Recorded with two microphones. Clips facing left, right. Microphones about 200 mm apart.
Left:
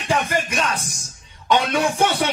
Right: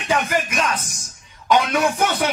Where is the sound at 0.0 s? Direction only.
30° left (ahead or behind).